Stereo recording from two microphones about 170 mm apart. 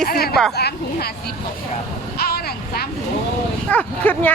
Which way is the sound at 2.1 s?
65° left (ahead or behind).